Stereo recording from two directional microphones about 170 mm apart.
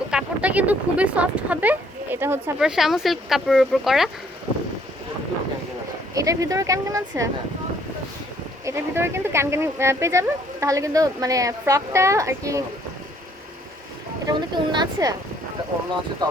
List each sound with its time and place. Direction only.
0.1 s speech: 5° right (ahead or behind)
2.6 s speech: 5° right (ahead or behind)
6.1 s speech: 20° right (ahead or behind)
8.6 s speech: 15° right (ahead or behind)
14.3 s speech: 25° right (ahead or behind)
16.2 s speech: 25° right (ahead or behind)